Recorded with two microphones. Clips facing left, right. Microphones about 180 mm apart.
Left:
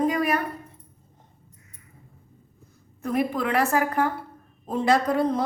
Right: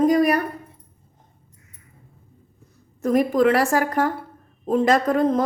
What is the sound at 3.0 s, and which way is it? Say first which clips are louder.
A woman's voice: right 8 dB; 40° right (ahead or behind).